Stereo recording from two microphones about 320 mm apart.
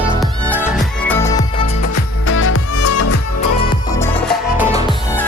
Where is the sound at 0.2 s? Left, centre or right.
Centre.